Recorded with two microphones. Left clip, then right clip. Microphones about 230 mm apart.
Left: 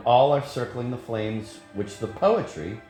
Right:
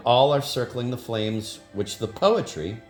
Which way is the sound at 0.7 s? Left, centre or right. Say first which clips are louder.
Right 2 dB; right.